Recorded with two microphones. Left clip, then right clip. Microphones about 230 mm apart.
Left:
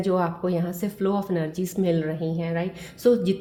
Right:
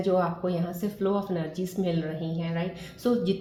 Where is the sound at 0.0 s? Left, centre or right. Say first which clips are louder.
Left 1 dB; left.